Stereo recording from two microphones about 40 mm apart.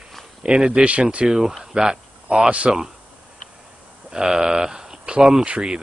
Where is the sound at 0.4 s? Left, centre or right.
Right.